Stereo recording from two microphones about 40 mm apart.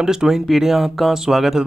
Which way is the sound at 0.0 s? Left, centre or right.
Centre.